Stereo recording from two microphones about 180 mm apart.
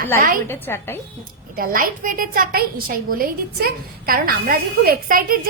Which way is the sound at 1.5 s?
50° right (ahead or behind).